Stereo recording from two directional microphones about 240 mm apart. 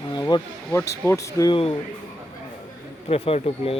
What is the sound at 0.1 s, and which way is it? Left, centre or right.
Speech, centre.